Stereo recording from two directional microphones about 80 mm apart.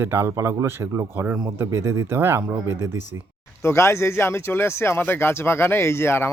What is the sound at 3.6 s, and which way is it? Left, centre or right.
Speech, left.